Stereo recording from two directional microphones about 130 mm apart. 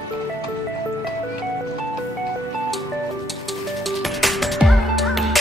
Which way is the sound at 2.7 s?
Centre (ahead or behind).